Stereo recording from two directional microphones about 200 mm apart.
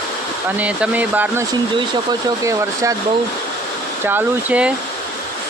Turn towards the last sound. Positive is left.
turn(degrees=-5)  # may be behind; listen again after turning